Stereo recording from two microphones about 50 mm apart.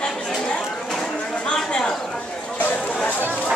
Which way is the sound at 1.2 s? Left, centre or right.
Left.